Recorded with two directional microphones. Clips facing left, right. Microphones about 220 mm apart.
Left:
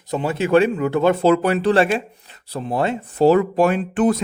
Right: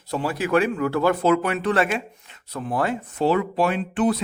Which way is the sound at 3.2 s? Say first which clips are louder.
Left 7 dB; 45° left (ahead or behind).